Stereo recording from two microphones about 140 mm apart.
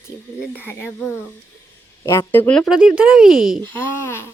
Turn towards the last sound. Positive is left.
turn(degrees=15)  # may be behind; listen again after turning